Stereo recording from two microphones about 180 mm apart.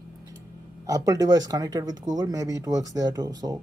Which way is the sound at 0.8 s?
20° right (ahead or behind).